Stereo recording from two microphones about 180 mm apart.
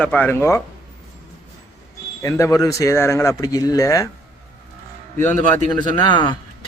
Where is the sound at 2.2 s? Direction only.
15° left (ahead or behind).